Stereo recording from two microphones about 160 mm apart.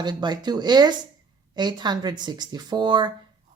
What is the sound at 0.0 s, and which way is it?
Speech, 30° right (ahead or behind).